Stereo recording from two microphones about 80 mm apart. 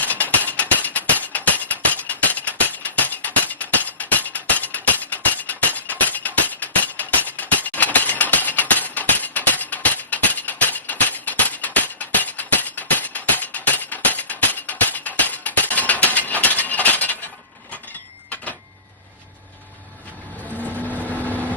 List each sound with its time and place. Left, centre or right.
0.0 s music: left
20.6 s vehicle: centre